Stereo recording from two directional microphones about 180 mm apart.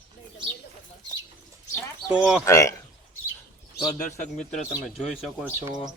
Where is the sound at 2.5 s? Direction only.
15° left (ahead or behind).